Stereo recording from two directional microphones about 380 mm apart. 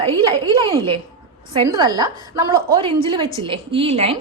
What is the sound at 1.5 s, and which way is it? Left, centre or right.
A woman's voice, centre.